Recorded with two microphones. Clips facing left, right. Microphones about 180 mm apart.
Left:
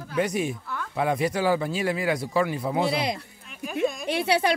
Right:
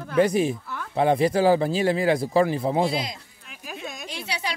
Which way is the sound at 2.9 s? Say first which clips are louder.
Left 2 dB; 65° left (ahead or behind).